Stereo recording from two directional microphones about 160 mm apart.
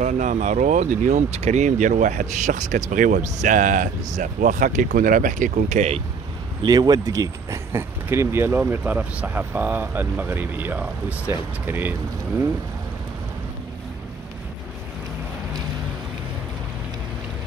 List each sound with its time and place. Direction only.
0.0 s speech: 50° right (ahead or behind)
6.6 s speech: 25° right (ahead or behind)